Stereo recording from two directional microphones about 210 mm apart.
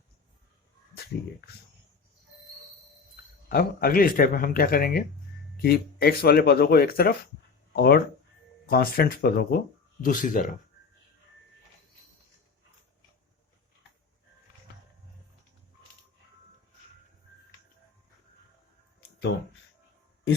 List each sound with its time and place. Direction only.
3.5 s speech: 45° left (ahead or behind)